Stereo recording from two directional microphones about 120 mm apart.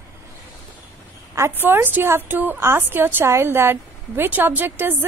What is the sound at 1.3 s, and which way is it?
A woman's voice, 20° right (ahead or behind).